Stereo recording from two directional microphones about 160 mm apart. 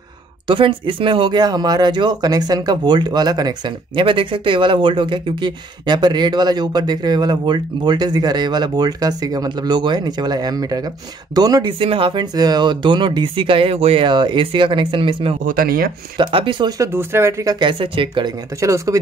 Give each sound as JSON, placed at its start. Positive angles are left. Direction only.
{"t": 0.5, "sound": "speech", "side_deg": -30}
{"t": 15.4, "sound": "speech", "side_deg": -65}
{"t": 16.2, "sound": "speech", "side_deg": -30}